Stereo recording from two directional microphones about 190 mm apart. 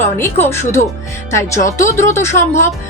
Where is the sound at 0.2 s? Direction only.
15° left (ahead or behind).